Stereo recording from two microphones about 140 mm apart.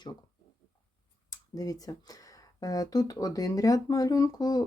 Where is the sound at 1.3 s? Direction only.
25° left (ahead or behind).